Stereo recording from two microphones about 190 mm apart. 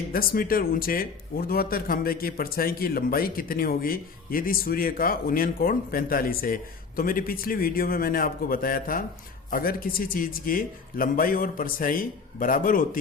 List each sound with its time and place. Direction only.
0.1 s speech: 50° left (ahead or behind)